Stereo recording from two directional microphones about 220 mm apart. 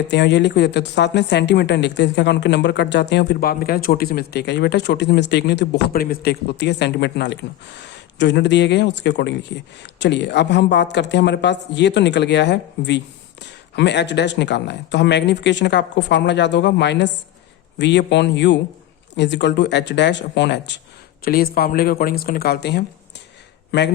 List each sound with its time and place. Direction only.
0.1 s a woman's voice: 50° left (ahead or behind)
21.2 s a woman's voice: 40° left (ahead or behind)